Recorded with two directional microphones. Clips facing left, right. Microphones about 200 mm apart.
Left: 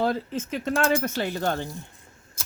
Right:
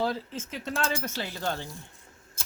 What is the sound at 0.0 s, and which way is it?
Speech, 60° left (ahead or behind).